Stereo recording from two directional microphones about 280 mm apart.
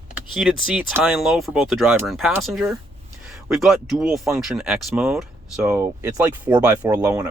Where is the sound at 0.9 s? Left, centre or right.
Centre.